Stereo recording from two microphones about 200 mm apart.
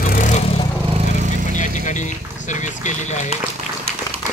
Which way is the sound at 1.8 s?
35° left (ahead or behind).